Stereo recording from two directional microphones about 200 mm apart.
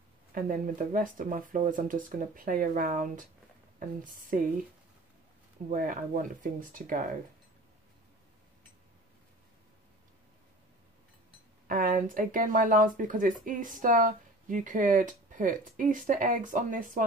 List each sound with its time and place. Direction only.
0.3 s speech: 45° right (ahead or behind)
4.3 s speech: 45° right (ahead or behind)
5.7 s speech: 40° right (ahead or behind)
11.6 s speech: 40° right (ahead or behind)